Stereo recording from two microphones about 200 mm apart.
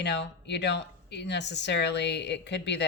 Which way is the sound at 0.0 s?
60° left (ahead or behind).